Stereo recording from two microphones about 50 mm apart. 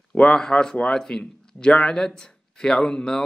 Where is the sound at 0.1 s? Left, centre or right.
Left.